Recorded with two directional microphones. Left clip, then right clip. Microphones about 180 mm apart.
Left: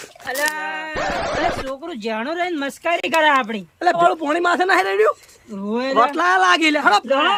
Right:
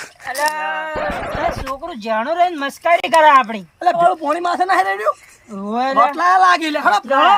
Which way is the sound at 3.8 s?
10° left (ahead or behind).